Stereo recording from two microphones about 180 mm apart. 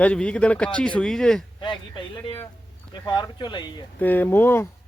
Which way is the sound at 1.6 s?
25° left (ahead or behind).